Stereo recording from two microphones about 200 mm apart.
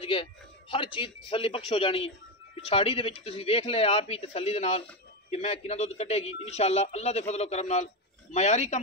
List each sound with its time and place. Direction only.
0.0 s speech: 25° left (ahead or behind)